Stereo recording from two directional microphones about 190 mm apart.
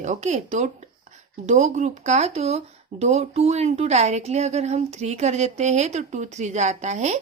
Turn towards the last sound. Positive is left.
turn(degrees=-35)  # may be behind; listen again after turning